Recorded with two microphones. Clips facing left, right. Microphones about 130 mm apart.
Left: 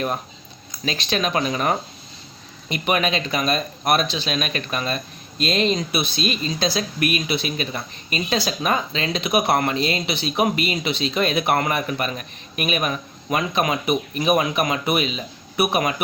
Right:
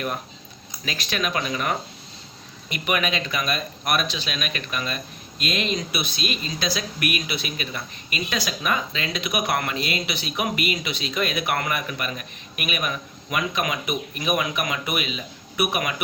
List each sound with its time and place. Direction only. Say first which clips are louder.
0.9 s speech: left 4 dB; 25° left (ahead or behind)